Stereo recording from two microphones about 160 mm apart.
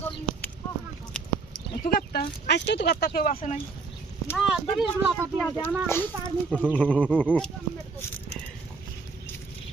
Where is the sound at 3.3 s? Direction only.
40° left (ahead or behind).